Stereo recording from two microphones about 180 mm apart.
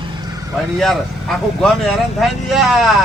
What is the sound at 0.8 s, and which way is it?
A man's voice, centre (ahead or behind).